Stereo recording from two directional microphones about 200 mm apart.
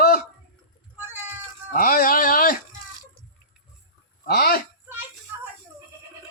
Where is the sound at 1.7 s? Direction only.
45° left (ahead or behind).